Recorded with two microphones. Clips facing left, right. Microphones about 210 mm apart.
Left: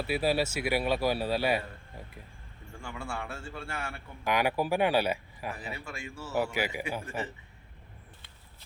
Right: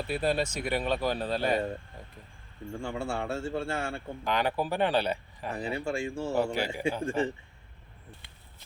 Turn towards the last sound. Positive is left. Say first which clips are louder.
# right 8 dB
turn(degrees=-30)  # may be behind; listen again after turning